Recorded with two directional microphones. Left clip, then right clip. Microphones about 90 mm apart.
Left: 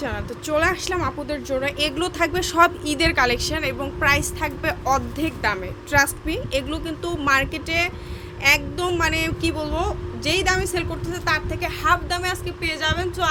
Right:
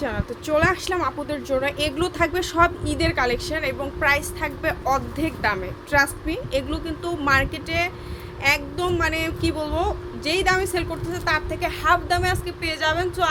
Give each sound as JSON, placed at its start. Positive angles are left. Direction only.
{"t": 0.0, "sound": "speech", "side_deg": 5}
{"t": 2.6, "sound": "a woman's voice", "side_deg": 30}
{"t": 11.6, "sound": "a woman's voice", "side_deg": -15}